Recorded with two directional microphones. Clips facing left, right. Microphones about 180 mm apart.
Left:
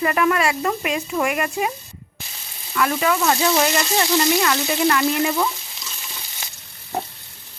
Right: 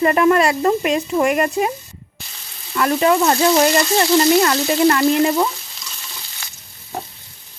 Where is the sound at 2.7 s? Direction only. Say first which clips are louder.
Right 5 dB; 35° right (ahead or behind).